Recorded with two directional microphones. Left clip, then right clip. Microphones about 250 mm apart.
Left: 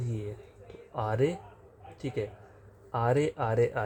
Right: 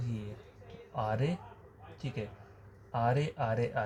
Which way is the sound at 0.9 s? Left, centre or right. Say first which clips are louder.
Left 5 dB; left.